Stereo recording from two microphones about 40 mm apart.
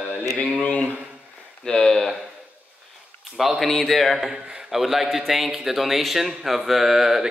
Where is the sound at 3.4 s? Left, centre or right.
Centre.